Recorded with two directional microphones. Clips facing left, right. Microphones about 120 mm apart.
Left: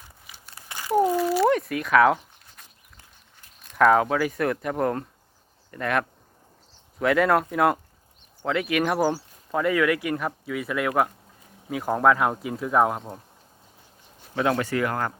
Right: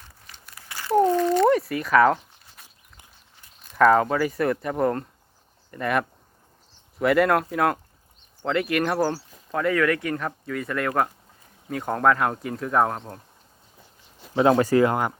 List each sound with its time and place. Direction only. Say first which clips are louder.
0.4 s crumpling: left 1 dB; 30° left (ahead or behind)
0.8 s crumpling: right 2 dB; 10° left (ahead or behind)
3.6 s speech: right 1 dB; centre (ahead or behind)
14.3 s speech: right 6 dB; 25° right (ahead or behind)